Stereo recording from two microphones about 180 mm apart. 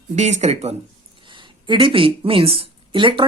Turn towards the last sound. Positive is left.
turn(degrees=-30)  # may be behind; listen again after turning